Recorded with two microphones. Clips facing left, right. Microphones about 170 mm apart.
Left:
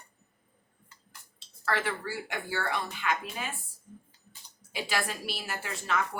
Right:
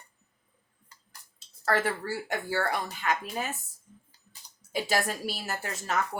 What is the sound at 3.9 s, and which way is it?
Typing, 55° left (ahead or behind).